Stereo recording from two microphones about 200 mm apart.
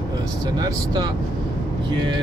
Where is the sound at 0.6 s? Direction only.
20° right (ahead or behind).